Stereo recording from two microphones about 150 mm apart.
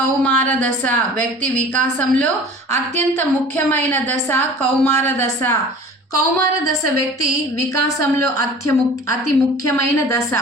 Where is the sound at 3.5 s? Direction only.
15° left (ahead or behind).